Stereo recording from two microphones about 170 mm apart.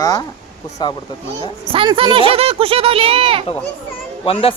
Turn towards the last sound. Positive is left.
turn(degrees=35)  # may be behind; listen again after turning